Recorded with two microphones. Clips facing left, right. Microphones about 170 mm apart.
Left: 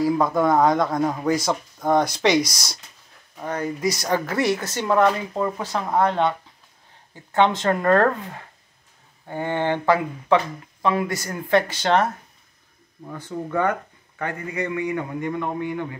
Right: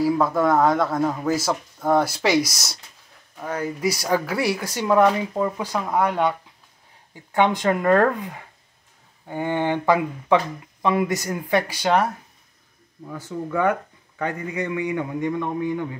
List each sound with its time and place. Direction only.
0.0 s a man's voice: 5° right (ahead or behind)
7.3 s speech: 15° right (ahead or behind)
13.3 s speech: 35° left (ahead or behind)
14.1 s speech: 15° right (ahead or behind)